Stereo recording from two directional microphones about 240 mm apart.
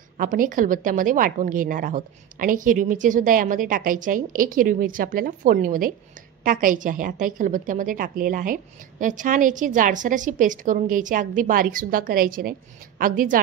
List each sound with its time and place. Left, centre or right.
0.2 s a woman's voice: right